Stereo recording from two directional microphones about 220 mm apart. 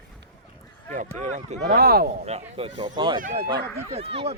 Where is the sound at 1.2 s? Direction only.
30° right (ahead or behind).